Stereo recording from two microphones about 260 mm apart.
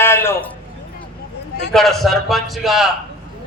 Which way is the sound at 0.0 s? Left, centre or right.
Centre.